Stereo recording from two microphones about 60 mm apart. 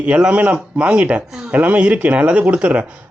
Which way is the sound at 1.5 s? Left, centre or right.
Right.